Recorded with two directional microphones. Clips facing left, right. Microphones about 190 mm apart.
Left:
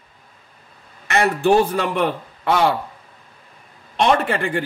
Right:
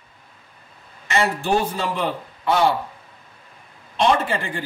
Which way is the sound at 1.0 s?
65° left (ahead or behind).